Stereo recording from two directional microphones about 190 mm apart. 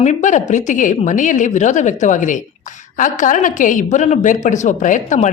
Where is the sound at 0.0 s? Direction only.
40° left (ahead or behind).